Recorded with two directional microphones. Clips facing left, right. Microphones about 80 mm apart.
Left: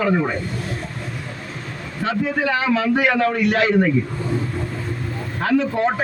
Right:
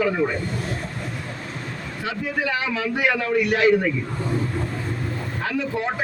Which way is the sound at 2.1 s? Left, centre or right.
Left.